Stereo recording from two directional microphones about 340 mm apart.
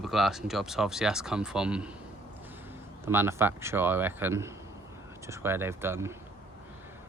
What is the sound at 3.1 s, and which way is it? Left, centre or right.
A man's voice, centre.